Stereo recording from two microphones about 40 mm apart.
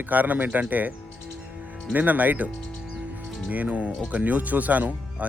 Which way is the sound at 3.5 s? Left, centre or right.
Right.